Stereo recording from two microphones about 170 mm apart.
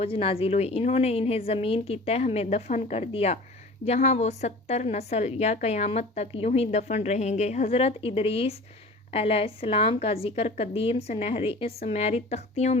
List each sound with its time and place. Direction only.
0.0 s a woman's voice: 35° left (ahead or behind)